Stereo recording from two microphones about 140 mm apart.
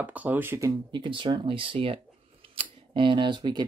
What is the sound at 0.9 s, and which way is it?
Speech, 35° right (ahead or behind).